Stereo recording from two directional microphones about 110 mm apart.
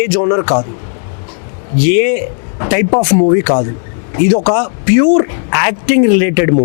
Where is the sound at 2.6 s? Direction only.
15° left (ahead or behind).